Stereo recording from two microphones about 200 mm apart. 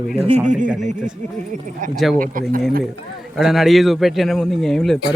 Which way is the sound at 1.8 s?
40° right (ahead or behind).